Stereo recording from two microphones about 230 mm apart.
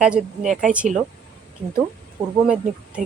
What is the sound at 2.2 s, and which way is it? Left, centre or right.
Speech, centre.